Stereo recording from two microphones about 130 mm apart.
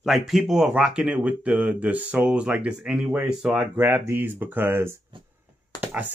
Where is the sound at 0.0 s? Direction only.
Centre (ahead or behind).